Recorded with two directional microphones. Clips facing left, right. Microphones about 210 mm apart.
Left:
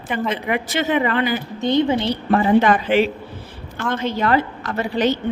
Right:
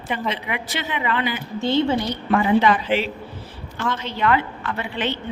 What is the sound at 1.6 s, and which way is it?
Speech, 15° left (ahead or behind).